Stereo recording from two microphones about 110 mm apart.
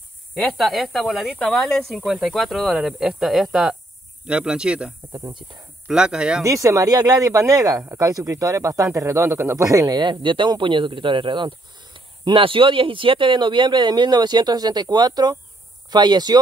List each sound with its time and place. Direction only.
0.4 s speech: centre (ahead or behind)
5.3 s speech: 45° right (ahead or behind)
5.9 s speech: 5° right (ahead or behind)
6.4 s speech: 30° right (ahead or behind)